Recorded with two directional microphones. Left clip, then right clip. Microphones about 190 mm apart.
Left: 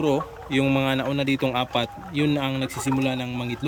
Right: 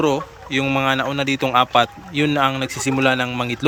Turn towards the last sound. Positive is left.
turn(degrees=5)  # may be behind; listen again after turning